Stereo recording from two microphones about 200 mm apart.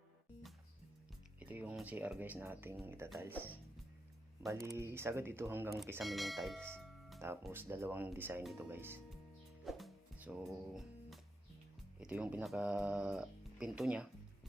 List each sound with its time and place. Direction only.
1.4 s speech: 5° right (ahead or behind)
4.4 s speech: 15° right (ahead or behind)
6.0 s speech: centre (ahead or behind)
7.4 s speech: 10° right (ahead or behind)
9.6 s music: centre (ahead or behind)
11.9 s speech: 5° right (ahead or behind)